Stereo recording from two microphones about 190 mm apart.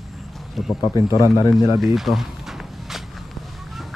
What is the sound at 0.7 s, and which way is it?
Speech, 20° left (ahead or behind).